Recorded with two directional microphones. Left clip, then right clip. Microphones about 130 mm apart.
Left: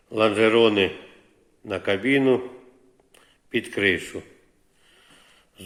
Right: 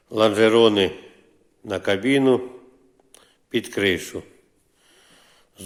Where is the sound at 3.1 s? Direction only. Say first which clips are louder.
Right 1 dB; 40° right (ahead or behind).